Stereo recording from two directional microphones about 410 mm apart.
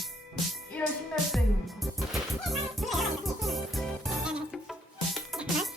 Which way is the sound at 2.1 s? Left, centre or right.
Centre.